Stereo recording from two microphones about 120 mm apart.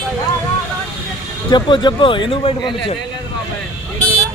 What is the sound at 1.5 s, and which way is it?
Speech, 40° left (ahead or behind).